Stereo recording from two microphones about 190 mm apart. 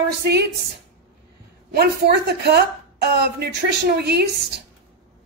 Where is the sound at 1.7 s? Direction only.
55° right (ahead or behind).